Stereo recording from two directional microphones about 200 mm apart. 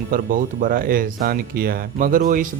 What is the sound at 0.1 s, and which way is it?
Speech, 40° right (ahead or behind).